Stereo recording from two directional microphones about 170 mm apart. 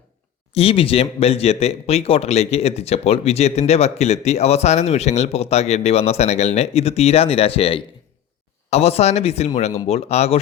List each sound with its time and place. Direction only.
0.5 s speech: 35° left (ahead or behind)